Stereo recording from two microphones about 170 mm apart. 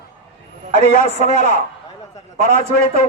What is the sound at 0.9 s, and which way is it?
A man's voice, 45° left (ahead or behind).